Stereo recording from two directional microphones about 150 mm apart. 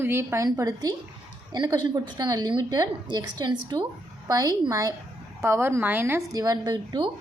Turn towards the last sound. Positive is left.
turn(degrees=-30)  # may be behind; listen again after turning